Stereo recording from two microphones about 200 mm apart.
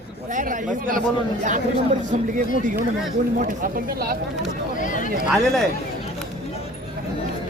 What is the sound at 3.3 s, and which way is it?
Speech, 45° right (ahead or behind).